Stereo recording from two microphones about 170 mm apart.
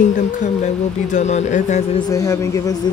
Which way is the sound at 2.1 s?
20° left (ahead or behind).